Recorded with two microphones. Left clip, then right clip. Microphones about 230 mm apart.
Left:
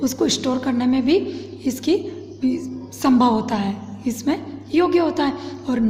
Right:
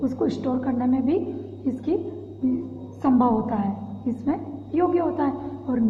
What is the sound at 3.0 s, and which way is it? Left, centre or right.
A woman's voice, left.